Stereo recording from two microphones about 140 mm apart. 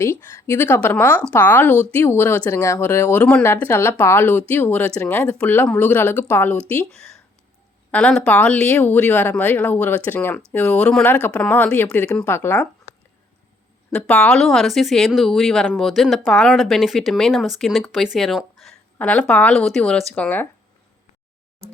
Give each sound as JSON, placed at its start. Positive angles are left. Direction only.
{"t": 0.0, "sound": "speech", "side_deg": 15}
{"t": 13.9, "sound": "a woman's voice", "side_deg": 5}